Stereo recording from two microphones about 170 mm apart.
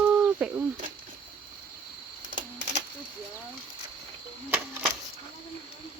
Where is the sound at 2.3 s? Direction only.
50° right (ahead or behind).